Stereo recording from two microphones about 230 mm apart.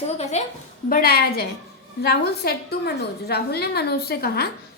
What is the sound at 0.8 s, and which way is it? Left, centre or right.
A woman's voice, left.